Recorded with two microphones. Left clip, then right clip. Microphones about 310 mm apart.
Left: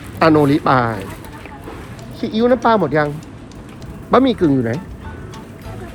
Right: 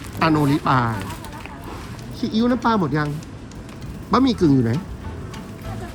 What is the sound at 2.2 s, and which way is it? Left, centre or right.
Speech, centre.